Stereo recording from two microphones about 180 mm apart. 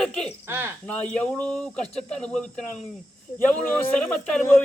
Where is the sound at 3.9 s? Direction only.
5° left (ahead or behind).